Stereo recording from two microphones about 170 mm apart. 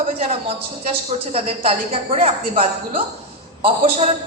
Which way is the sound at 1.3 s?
35° right (ahead or behind).